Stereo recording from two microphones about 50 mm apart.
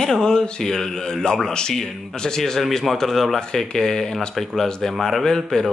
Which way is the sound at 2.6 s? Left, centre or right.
Centre.